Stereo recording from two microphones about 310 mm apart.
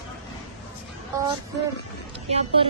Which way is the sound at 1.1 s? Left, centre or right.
Centre.